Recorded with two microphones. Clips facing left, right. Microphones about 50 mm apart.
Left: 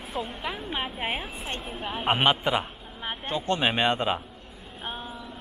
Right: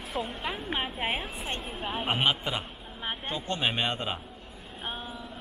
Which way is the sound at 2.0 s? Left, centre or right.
Left.